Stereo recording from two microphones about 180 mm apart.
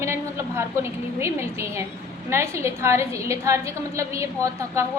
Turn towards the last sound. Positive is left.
turn(degrees=-15)  # may be behind; listen again after turning